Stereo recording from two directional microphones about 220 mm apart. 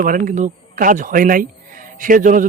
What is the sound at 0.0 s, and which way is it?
A man's voice, 35° right (ahead or behind).